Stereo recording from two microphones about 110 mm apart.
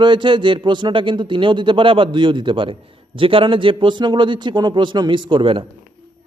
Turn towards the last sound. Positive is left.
turn(degrees=-55)  # may be behind; listen again after turning